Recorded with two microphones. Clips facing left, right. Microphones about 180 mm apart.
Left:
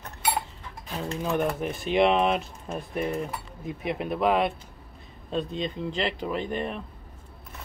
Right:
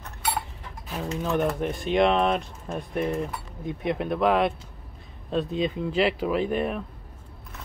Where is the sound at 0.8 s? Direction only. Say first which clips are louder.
Right 1 dB; 5° right (ahead or behind).